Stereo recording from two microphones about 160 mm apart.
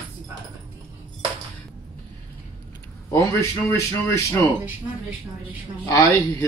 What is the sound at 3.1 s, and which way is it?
A man's voice, 15° left (ahead or behind).